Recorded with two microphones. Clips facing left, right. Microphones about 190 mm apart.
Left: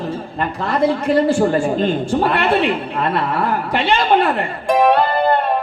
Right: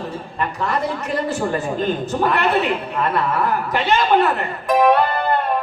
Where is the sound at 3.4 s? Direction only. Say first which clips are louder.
Left 1 dB; 30° left (ahead or behind).